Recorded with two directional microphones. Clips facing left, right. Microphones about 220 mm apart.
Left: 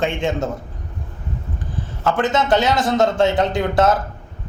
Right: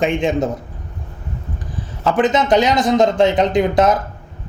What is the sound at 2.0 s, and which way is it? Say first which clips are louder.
Speech: right 3 dB; 20° right (ahead or behind).